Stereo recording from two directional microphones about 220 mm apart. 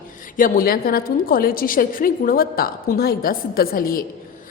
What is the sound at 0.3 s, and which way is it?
A woman's voice, 40° left (ahead or behind).